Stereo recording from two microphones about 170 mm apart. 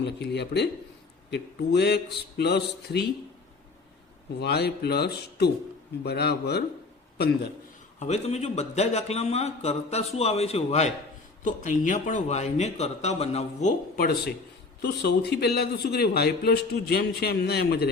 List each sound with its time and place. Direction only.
0.0 s a man's voice: 85° left
4.4 s a man's voice: 70° left (ahead or behind)
7.9 s a man's voice: 40° left (ahead or behind)
13.9 s a man's voice: 65° left (ahead or behind)